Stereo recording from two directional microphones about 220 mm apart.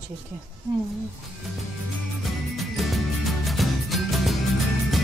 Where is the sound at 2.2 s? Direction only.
Centre (ahead or behind).